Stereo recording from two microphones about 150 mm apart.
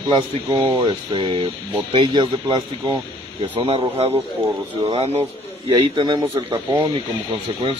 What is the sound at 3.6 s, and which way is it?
A man's voice, 40° right (ahead or behind).